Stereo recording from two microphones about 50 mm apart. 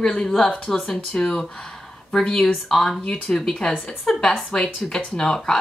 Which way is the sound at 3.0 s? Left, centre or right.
Centre.